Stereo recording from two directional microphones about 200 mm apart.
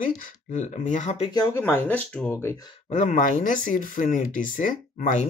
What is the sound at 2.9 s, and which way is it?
Speech, 40° left (ahead or behind).